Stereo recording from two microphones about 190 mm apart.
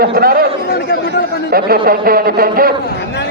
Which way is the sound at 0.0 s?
50° right (ahead or behind).